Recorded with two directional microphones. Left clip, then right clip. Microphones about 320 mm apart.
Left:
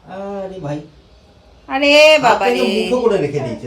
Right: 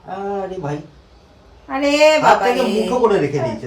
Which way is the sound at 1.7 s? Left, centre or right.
Centre.